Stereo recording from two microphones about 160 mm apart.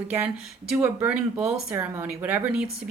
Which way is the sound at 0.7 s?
10° right (ahead or behind).